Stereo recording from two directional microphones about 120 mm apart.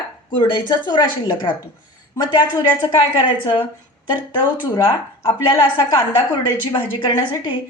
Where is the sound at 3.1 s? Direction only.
45° left (ahead or behind).